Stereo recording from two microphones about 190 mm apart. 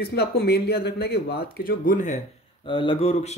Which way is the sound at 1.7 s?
45° left (ahead or behind).